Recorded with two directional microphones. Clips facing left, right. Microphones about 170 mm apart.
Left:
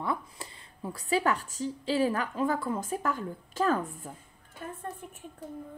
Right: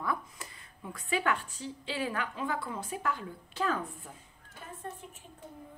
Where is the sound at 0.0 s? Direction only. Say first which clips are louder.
Left 2 dB; 25° left (ahead or behind); by 4.8 s 55° left (ahead or behind).